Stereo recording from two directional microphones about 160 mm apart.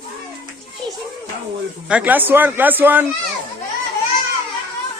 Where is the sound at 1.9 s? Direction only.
10° right (ahead or behind).